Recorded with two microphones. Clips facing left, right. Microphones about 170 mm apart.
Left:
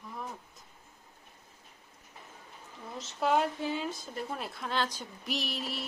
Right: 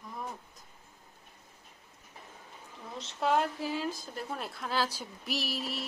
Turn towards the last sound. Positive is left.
turn(degrees=0)  # may be behind; listen again after turning